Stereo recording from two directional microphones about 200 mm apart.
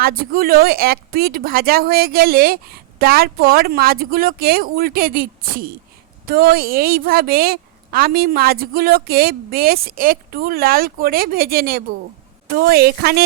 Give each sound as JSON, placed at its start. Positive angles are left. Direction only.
{"t": 0.0, "sound": "speech", "side_deg": -45}